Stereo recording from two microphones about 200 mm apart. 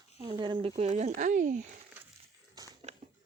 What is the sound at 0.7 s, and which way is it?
Speech, 35° right (ahead or behind).